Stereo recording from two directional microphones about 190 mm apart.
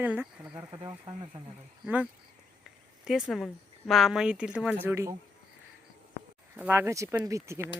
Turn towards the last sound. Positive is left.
turn(degrees=-15)  # may be behind; listen again after turning